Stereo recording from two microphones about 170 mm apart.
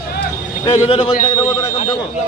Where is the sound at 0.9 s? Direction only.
30° left (ahead or behind).